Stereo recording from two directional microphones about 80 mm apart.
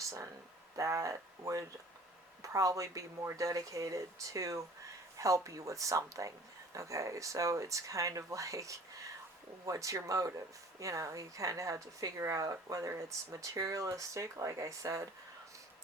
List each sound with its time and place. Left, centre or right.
0.8 s speech: right